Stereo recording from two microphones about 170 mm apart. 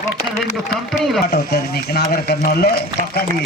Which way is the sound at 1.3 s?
65° left (ahead or behind).